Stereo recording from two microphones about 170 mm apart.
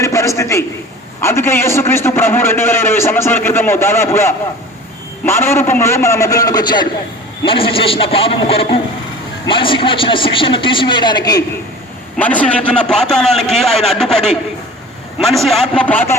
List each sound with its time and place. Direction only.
0.0 s a sound: 20° left (ahead or behind)
1.2 s a man's voice: 15° left (ahead or behind)
12.1 s a man's voice: 10° left (ahead or behind)